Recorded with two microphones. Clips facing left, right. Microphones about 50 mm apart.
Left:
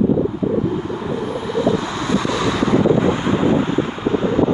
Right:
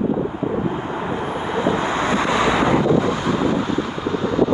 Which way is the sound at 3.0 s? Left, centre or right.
Left.